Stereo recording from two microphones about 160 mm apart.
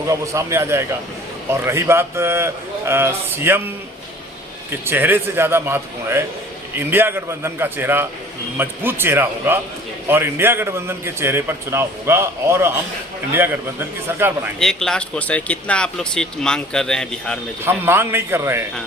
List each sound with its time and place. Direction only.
0.1 s a man's voice: 15° right (ahead or behind)
4.7 s a man's voice: 10° right (ahead or behind)
14.1 s a man's voice: 15° right (ahead or behind)
14.6 s speech: 5° left (ahead or behind)
17.7 s a man's voice: 15° right (ahead or behind)